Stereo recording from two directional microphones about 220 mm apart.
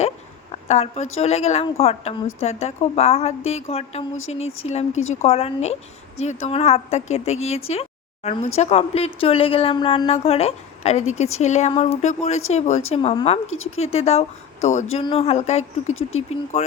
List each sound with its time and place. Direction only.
0.5 s a woman's voice: 30° left (ahead or behind)
16.0 s speech: 65° left (ahead or behind)
16.3 s speech: 30° left (ahead or behind)